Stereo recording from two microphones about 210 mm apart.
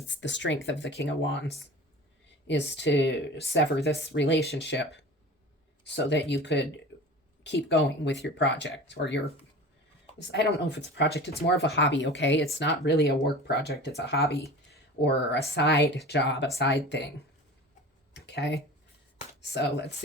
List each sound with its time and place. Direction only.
0.1 s speech: 60° left (ahead or behind)
2.5 s speech: 55° left (ahead or behind)
5.8 s speech: 55° left (ahead or behind)
14.2 s speech: 15° left (ahead or behind)
15.0 s speech: 55° left (ahead or behind)
18.1 s a sound: 55° left (ahead or behind)